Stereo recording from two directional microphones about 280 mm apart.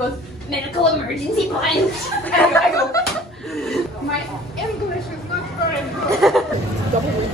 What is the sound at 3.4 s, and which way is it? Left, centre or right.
Chuckle, centre.